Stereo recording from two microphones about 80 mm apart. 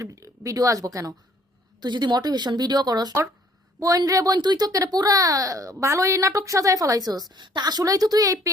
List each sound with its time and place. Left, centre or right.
0.0 s speech: right
1.8 s a woman's voice: right
3.8 s speech: right
4.4 s speech: right